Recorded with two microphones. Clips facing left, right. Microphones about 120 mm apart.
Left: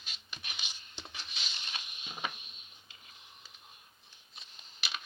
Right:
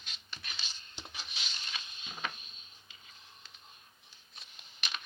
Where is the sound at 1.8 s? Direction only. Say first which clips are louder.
Left 1 dB; 20° left (ahead or behind).